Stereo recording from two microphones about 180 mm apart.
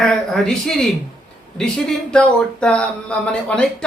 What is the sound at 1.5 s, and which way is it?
Speech, 5° left (ahead or behind).